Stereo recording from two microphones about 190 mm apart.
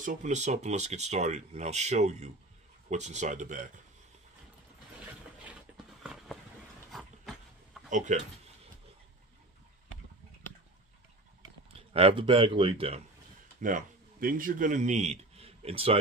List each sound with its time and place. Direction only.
0.0 s speech: 40° right (ahead or behind)
6.9 s dog: centre (ahead or behind)
7.9 s speech: 40° right (ahead or behind)
11.9 s a man's voice: 30° right (ahead or behind)
13.6 s a man's voice: 45° right (ahead or behind)